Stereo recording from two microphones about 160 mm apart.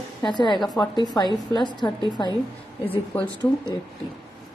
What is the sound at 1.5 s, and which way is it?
Speech, 30° left (ahead or behind).